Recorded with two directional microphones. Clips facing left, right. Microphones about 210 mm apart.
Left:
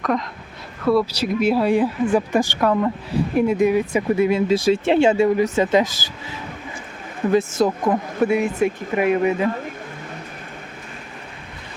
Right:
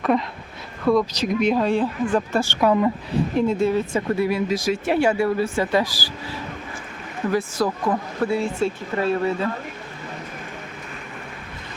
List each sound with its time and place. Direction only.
0.0 s speech: 5° right (ahead or behind)
0.9 s speech: 5° left (ahead or behind)
2.6 s a woman's voice: 5° right (ahead or behind)
3.3 s speech: 15° left (ahead or behind)
7.3 s speech: 25° left (ahead or behind)